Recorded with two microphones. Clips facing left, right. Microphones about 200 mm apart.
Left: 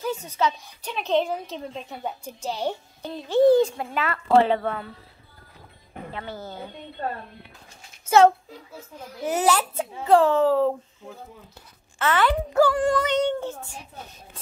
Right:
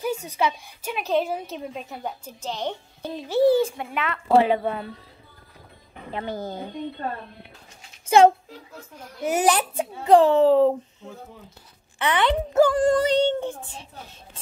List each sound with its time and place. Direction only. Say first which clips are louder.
0.0 s a woman's voice: right 1 dB; 10° right (ahead or behind)
2.0 s a woman's voice: left 3 dB; 10° left (ahead or behind)
3.0 s a woman's voice: left 1 dB; 10° right (ahead or behind)
4.4 s a woman's voice: even; 15° right (ahead or behind)
6.1 s a woman's voice: right 6 dB; 15° right (ahead or behind)
9.2 s a woman's voice: right 1 dB; 10° right (ahead or behind)
12.0 s speech: even; 15° right (ahead or behind)
12.7 s speech: right 3 dB; 35° right (ahead or behind)
13.4 s a woman's voice: right 2 dB; 15° right (ahead or behind)